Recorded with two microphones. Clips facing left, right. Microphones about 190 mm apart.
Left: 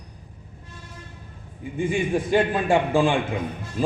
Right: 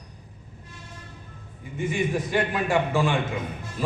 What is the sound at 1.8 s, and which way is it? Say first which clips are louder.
A man's voice: left 3 dB; 30° left (ahead or behind).